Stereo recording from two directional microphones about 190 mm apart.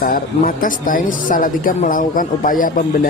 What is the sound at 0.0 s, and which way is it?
Speech, 45° left (ahead or behind).